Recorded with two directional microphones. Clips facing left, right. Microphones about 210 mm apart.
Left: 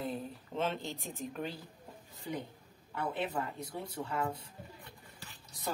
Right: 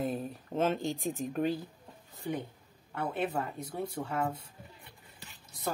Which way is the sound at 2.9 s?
50° right (ahead or behind).